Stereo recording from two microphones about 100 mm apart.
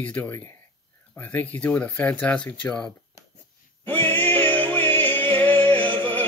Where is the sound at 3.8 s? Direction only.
20° left (ahead or behind).